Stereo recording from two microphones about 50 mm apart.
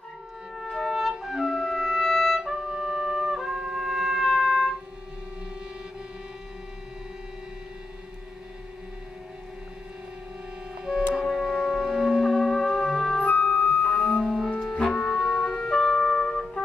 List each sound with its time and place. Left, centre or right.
0.7 s music: centre
4.4 s music: centre
11.2 s music: centre
11.8 s music: centre
12.3 s music: centre
13.2 s organ: left
14.6 s music: centre